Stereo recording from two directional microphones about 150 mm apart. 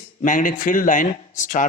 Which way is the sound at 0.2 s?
60° left (ahead or behind).